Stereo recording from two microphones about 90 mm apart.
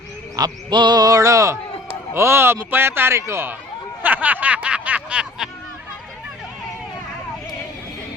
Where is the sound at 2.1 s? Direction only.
30° right (ahead or behind).